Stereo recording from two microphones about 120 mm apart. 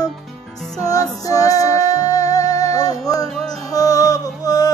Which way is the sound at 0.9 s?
30° left (ahead or behind).